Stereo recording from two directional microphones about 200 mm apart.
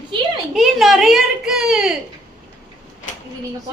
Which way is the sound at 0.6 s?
Centre (ahead or behind).